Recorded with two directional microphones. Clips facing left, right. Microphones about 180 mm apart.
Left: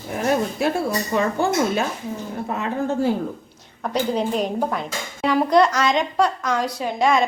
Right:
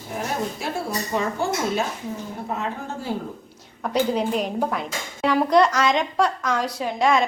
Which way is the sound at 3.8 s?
5° right (ahead or behind).